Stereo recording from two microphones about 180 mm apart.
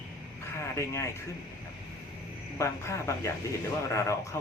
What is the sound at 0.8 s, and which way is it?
Speech, 15° left (ahead or behind).